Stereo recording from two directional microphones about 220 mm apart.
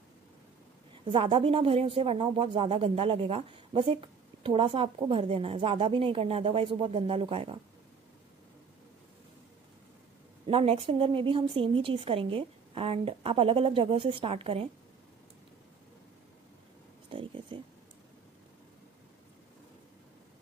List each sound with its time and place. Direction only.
1.0 s speech: 25° right (ahead or behind)
10.4 s speech: 25° right (ahead or behind)
17.1 s a sound: 25° right (ahead or behind)